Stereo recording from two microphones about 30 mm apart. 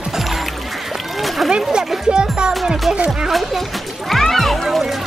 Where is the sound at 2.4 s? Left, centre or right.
Right.